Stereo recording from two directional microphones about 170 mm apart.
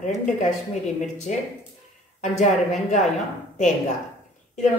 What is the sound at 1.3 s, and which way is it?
Speech, 45° left (ahead or behind).